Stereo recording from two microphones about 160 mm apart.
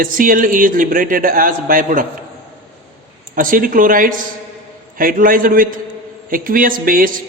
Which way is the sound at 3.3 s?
60° right (ahead or behind).